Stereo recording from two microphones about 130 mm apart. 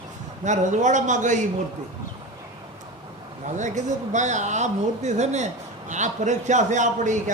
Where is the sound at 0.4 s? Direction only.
70° right (ahead or behind).